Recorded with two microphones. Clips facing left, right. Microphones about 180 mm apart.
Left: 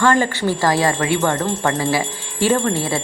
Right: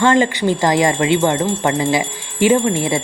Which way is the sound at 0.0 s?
20° right (ahead or behind).